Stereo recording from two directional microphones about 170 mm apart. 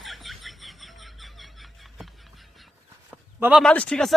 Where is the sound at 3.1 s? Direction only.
10° right (ahead or behind).